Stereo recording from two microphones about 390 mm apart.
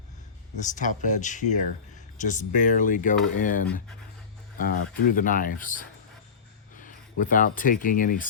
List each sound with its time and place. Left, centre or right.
0.6 s speech: centre